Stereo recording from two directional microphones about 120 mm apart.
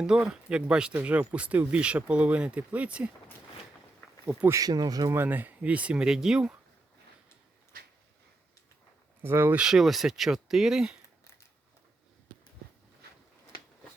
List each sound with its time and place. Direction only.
0.0 s speech: 5° right (ahead or behind)
4.3 s speech: 15° right (ahead or behind)
4.5 s speech: 30° right (ahead or behind)
5.1 s speech: 15° right (ahead or behind)
9.2 s speech: 20° right (ahead or behind)
9.6 s speech: 5° right (ahead or behind)